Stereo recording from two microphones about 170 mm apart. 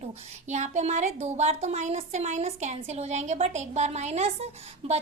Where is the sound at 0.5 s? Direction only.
45° right (ahead or behind).